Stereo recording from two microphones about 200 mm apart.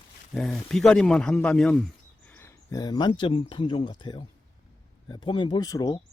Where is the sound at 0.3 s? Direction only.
Centre (ahead or behind).